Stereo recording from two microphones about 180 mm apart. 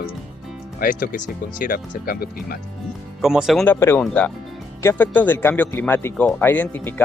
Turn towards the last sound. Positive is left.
turn(degrees=10)  # may be behind; listen again after turning